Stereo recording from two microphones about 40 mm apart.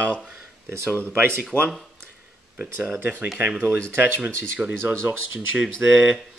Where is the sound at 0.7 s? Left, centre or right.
Right.